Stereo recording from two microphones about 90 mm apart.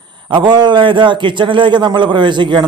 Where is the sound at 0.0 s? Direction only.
60° right (ahead or behind).